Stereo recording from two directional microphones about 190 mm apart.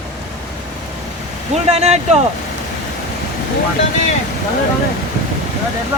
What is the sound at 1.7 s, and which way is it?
Speech, 35° right (ahead or behind).